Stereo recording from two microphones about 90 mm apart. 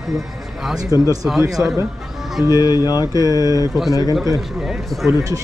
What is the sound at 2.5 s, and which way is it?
Speech, 45° left (ahead or behind).